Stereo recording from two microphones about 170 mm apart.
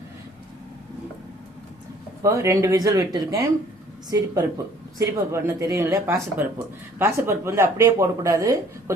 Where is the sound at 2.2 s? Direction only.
20° right (ahead or behind).